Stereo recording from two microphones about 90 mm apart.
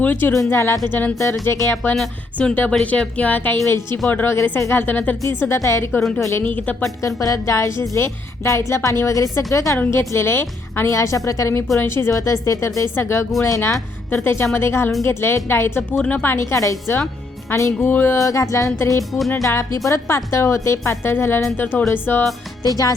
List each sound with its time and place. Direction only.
0.0 s a woman's voice: 20° left (ahead or behind)
2.0 s a woman's voice: 10° left (ahead or behind); by 6.4 s 35° left (ahead or behind)
6.4 s speech: 20° left (ahead or behind)
7.2 s a woman's voice: 35° left (ahead or behind)
16.0 s speech: 15° left (ahead or behind)
16.2 s a woman's voice: 30° left (ahead or behind)
18.2 s a woman's voice: 35° left (ahead or behind)